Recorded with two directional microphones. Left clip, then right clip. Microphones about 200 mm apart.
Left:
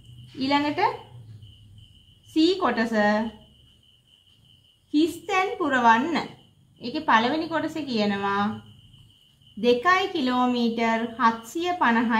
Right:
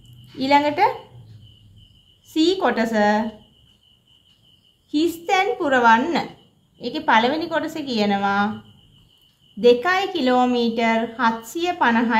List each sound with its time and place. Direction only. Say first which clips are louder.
0.4 s a woman's voice: right 7 dB; 35° right (ahead or behind)
2.3 s a woman's voice: right 3 dB; 35° right (ahead or behind)
4.9 s a woman's voice: right 4 dB; 35° right (ahead or behind)
9.6 s a woman's voice: right 4 dB; 30° right (ahead or behind)